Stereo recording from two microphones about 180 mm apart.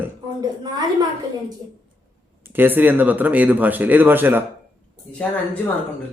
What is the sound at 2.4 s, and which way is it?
Speech, 10° right (ahead or behind).